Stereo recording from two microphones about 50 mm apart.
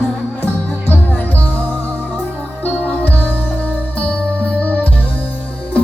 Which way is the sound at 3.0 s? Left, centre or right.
Left.